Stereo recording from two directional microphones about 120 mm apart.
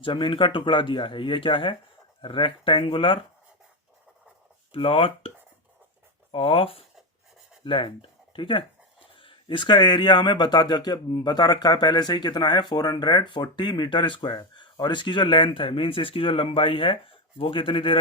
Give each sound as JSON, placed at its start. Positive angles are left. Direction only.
{"t": 0.0, "sound": "speech", "side_deg": 45}
{"t": 4.7, "sound": "speech", "side_deg": 50}
{"t": 6.3, "sound": "speech", "side_deg": 50}